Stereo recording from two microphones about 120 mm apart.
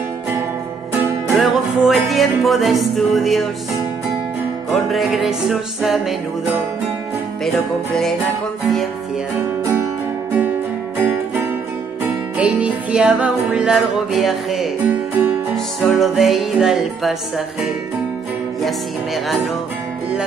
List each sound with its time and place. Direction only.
0.9 s music: 20° right (ahead or behind)
1.3 s music: centre (ahead or behind)
10.3 s music: 15° right (ahead or behind)
18.6 s music: centre (ahead or behind)